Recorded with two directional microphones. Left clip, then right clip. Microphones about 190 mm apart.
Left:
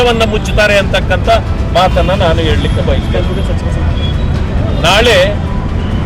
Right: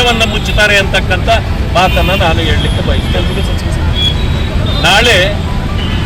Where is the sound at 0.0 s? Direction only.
20° left (ahead or behind).